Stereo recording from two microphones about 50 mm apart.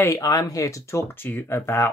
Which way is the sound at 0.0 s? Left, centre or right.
Left.